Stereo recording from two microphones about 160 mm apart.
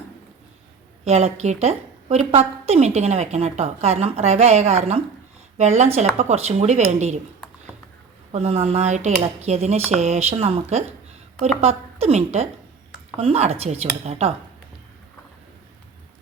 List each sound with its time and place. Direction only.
1.0 s a woman's voice: 45° right (ahead or behind)
8.3 s speech: 40° right (ahead or behind)